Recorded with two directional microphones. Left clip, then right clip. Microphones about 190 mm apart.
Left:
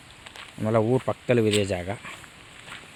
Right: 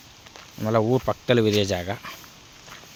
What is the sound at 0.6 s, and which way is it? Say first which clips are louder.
Speech: right 1 dB; 5° right (ahead or behind).